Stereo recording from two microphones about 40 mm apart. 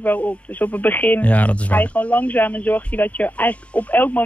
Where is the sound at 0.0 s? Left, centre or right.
Left.